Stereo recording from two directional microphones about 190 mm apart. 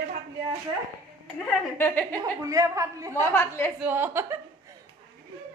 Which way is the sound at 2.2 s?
15° right (ahead or behind).